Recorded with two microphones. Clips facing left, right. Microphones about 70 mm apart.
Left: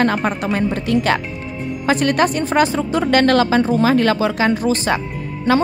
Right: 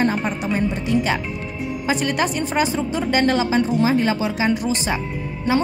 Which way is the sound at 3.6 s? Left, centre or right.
Left.